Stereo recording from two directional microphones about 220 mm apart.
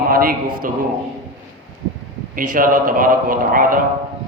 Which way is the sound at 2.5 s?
40° right (ahead or behind).